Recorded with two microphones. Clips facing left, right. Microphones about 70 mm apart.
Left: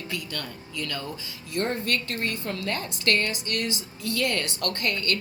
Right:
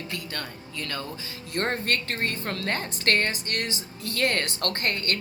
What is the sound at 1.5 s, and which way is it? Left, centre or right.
A woman's voice, right.